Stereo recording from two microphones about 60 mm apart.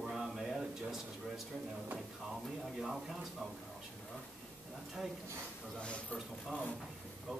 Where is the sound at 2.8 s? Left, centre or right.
Centre.